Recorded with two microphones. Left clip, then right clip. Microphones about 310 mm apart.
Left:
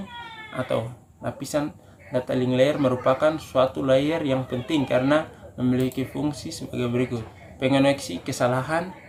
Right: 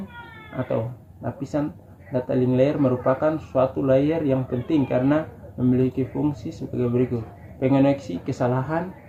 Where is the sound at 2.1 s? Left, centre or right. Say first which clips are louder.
Right 1 dB; left.